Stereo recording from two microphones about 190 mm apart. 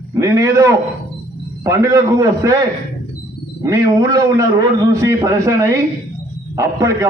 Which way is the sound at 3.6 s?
15° right (ahead or behind).